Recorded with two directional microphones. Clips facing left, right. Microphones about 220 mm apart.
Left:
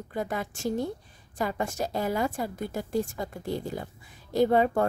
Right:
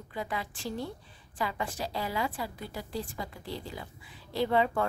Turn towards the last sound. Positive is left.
turn(degrees=45)  # may be behind; listen again after turning